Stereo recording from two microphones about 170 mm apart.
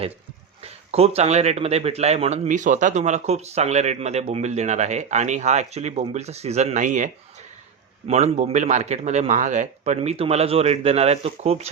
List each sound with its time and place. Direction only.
0.6 s speech: 35° right (ahead or behind)